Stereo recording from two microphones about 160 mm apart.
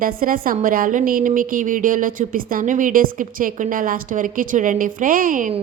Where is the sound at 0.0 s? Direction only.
60° right (ahead or behind).